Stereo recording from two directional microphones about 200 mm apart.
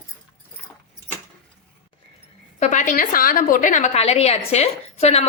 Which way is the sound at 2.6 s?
40° left (ahead or behind).